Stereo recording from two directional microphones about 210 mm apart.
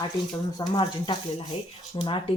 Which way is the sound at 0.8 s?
25° left (ahead or behind).